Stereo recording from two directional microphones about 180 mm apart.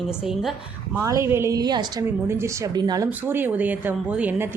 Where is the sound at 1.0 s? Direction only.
15° right (ahead or behind).